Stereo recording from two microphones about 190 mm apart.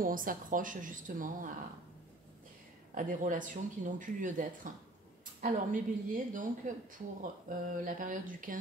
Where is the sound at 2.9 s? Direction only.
45° right (ahead or behind).